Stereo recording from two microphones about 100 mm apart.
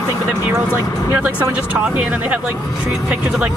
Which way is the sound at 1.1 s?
15° right (ahead or behind).